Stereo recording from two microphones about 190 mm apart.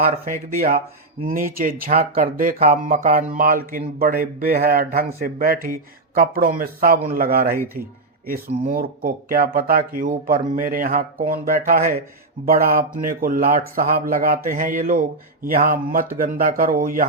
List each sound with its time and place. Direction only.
0.3 s speech: 50° right (ahead or behind)
8.6 s speech: 50° right (ahead or behind)
12.5 s speech: 50° right (ahead or behind)